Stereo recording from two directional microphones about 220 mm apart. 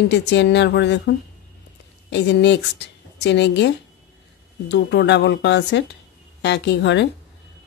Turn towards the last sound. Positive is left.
turn(degrees=55)  # may be behind; listen again after turning